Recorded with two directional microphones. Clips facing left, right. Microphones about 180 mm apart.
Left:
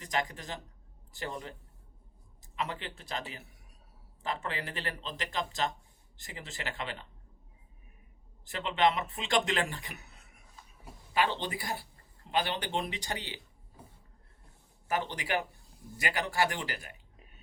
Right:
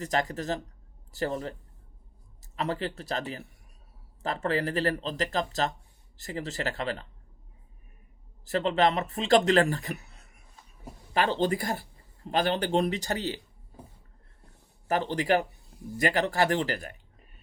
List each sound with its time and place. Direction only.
0.0 s speech: 40° right (ahead or behind)
2.6 s speech: 40° right (ahead or behind)
8.4 s speech: 40° right (ahead or behind)
10.0 s a sound: centre (ahead or behind)
11.1 s speech: 45° right (ahead or behind)
14.8 s speech: 40° right (ahead or behind)